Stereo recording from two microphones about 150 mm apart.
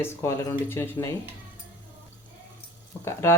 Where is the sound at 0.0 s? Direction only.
20° left (ahead or behind).